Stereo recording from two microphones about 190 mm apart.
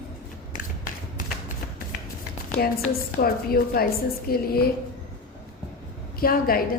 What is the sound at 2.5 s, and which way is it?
A woman's voice, 55° left (ahead or behind).